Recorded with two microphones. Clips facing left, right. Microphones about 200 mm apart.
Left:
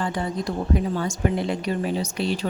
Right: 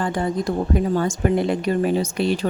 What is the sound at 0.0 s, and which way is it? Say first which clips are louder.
Speech: right 4 dB; 50° right (ahead or behind).